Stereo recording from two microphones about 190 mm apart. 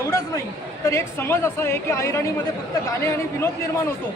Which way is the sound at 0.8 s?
15° left (ahead or behind).